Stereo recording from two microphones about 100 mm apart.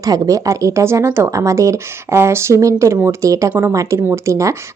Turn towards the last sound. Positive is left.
turn(degrees=-30)  # may be behind; listen again after turning